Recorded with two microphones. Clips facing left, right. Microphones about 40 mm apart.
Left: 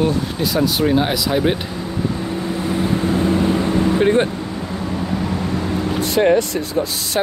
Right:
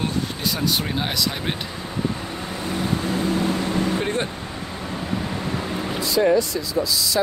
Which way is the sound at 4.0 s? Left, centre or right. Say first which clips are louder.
Left 9 dB; left.